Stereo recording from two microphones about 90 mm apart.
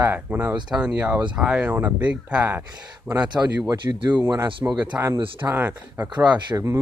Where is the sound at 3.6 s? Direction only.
40° right (ahead or behind).